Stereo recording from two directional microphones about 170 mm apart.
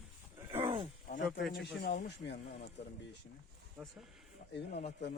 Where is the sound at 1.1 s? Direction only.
50° left (ahead or behind).